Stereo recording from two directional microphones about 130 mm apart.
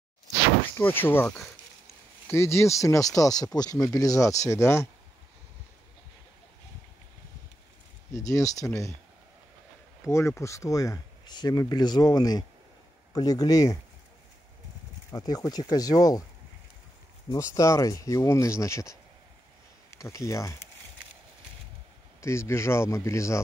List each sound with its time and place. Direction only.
0.7 s speech: 15° left (ahead or behind)
8.1 s speech: 25° left (ahead or behind)
10.0 s speech: 20° left (ahead or behind)
15.0 s speech: 30° left (ahead or behind)
17.3 s speech: 25° left (ahead or behind)
22.2 s speech: 20° left (ahead or behind)